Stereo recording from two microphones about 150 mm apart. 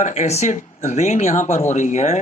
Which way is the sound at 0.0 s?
50° left (ahead or behind).